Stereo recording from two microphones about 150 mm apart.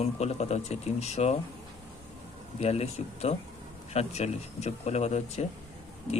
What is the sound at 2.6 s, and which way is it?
Speech, 45° left (ahead or behind).